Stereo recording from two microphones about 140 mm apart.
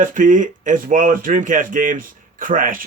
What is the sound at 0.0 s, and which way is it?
Speech, 70° right (ahead or behind).